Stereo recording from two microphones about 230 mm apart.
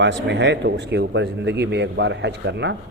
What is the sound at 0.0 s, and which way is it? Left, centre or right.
A man's voice, right.